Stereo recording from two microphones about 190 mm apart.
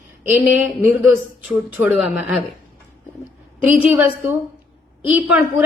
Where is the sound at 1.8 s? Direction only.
Centre (ahead or behind).